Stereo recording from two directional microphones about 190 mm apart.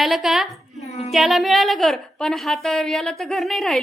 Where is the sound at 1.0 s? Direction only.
Centre (ahead or behind).